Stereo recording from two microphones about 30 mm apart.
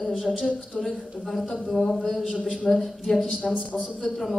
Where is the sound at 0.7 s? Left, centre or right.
Left.